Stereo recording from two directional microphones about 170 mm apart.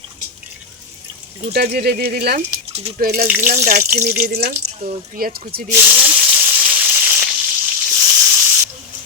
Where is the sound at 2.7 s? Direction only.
35° right (ahead or behind).